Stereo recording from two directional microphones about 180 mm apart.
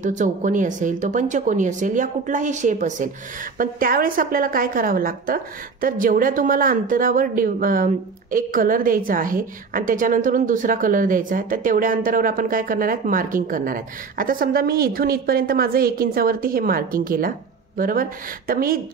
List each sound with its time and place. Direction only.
0.0 s a woman's voice: 45° right (ahead or behind)